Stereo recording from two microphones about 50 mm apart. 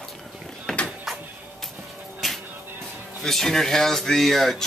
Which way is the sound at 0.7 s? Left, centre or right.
Centre.